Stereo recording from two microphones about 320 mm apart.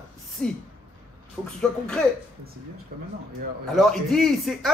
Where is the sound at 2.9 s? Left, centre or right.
Right.